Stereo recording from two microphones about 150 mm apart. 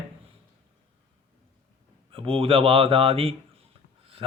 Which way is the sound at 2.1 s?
35° right (ahead or behind).